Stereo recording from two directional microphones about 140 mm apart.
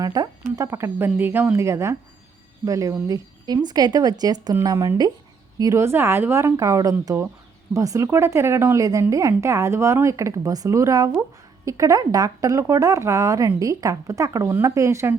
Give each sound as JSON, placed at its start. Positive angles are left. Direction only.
{"t": 0.0, "sound": "speech", "side_deg": -30}